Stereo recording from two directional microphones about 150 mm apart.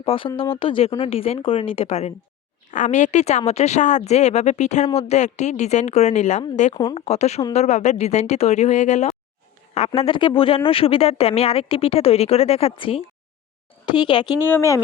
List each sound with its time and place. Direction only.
0.0 s speech: 35° left (ahead or behind)
2.7 s speech: 55° left (ahead or behind); by 14.3 s 30° left (ahead or behind)
14.4 s speech: 15° left (ahead or behind)